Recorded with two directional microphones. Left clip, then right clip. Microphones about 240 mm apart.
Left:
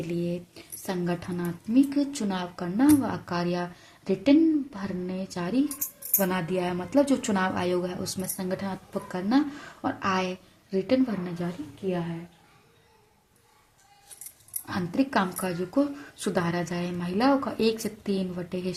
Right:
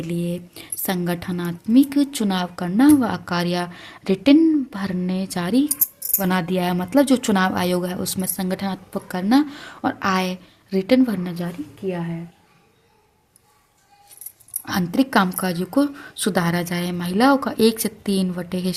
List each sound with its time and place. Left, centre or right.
0.0 s speech: right
14.6 s speech: right